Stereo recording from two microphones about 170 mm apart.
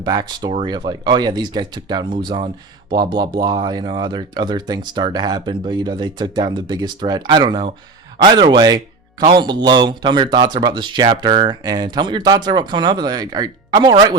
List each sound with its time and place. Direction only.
0.0 s speech: 25° right (ahead or behind)